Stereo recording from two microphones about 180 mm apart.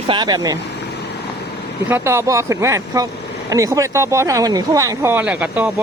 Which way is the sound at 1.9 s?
15° right (ahead or behind).